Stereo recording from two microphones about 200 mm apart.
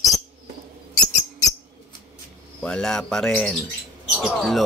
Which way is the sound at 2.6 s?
5° left (ahead or behind).